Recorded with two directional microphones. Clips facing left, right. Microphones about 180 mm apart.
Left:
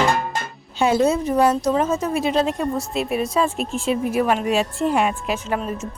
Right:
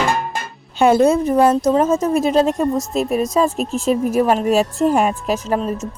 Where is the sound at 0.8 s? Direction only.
55° right (ahead or behind).